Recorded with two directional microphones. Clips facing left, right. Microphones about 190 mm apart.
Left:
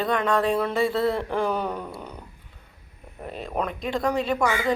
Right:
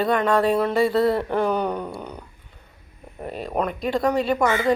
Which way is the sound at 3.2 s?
Centre (ahead or behind).